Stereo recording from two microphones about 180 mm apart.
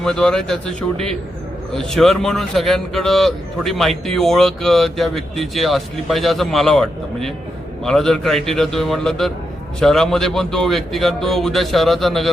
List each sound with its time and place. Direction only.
0.0 s a man's voice: 5° left (ahead or behind)